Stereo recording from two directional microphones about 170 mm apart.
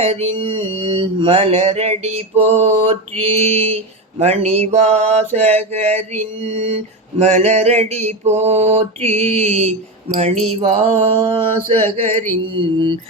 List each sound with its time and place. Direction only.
0.0 s mantra: 35° right (ahead or behind)